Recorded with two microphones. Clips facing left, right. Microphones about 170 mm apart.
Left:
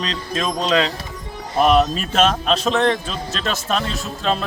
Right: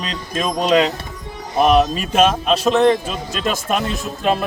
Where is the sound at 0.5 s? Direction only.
20° right (ahead or behind).